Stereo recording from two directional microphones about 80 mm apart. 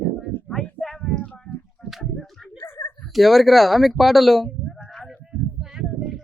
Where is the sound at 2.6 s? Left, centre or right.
Left.